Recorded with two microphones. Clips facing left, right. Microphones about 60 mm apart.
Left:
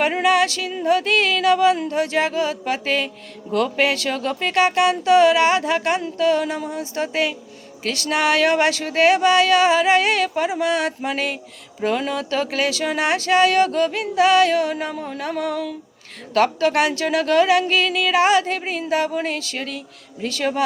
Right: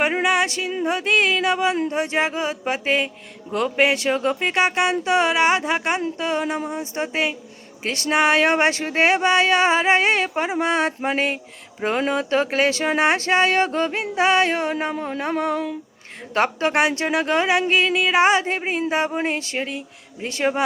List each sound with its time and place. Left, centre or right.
0.0 s speech: right